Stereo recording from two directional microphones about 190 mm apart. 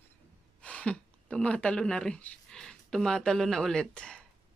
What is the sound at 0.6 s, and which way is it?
Speech, 5° left (ahead or behind).